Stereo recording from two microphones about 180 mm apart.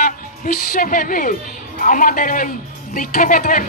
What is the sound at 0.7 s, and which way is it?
A woman's voice, 50° left (ahead or behind).